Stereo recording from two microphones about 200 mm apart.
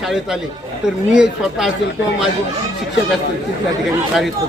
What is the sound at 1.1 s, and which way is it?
Speech, 5° right (ahead or behind).